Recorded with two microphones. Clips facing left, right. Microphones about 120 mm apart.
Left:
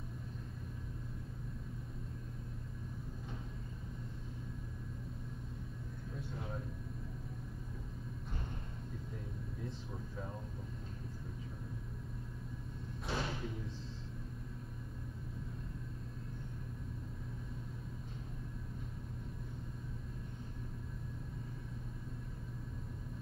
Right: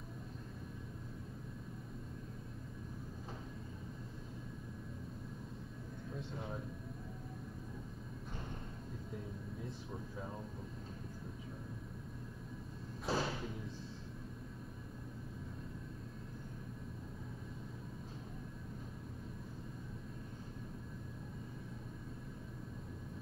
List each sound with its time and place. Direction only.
13.0 s thump: 35° right (ahead or behind)